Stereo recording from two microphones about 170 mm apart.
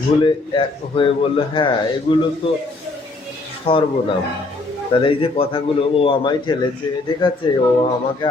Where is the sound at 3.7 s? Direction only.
35° left (ahead or behind).